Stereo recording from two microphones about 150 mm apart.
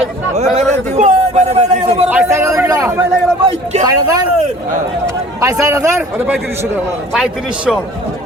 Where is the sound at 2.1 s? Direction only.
15° right (ahead or behind).